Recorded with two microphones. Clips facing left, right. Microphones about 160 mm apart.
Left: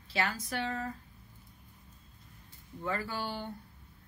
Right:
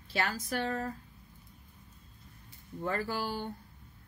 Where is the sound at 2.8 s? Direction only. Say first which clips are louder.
Right 2 dB; 40° right (ahead or behind).